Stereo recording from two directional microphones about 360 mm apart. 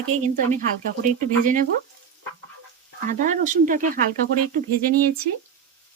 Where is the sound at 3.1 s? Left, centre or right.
Right.